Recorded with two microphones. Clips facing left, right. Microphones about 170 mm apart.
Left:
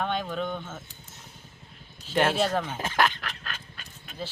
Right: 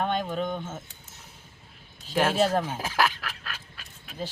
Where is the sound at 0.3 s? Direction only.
15° right (ahead or behind).